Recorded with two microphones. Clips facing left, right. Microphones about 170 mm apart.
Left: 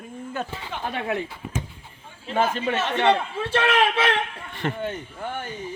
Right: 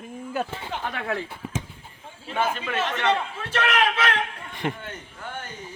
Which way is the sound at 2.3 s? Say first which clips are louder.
Left 3 dB; 40° left (ahead or behind).